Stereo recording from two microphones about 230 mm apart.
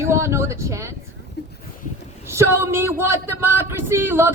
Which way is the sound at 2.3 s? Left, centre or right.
Centre.